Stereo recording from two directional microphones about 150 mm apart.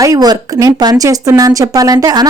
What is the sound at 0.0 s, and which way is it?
Speech, 25° right (ahead or behind).